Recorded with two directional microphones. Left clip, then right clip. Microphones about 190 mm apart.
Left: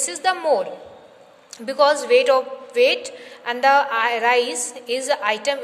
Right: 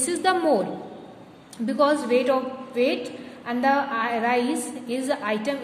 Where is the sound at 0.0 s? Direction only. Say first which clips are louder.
Left 1 dB; 20° left (ahead or behind).